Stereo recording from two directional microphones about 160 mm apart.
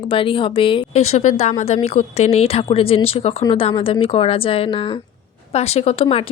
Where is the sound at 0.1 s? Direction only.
35° left (ahead or behind).